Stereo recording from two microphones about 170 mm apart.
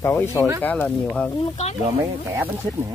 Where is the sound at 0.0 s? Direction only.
15° left (ahead or behind).